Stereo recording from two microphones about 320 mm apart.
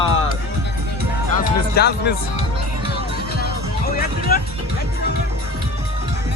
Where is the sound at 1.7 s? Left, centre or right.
Left.